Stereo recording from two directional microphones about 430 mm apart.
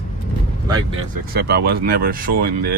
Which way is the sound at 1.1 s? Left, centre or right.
Right.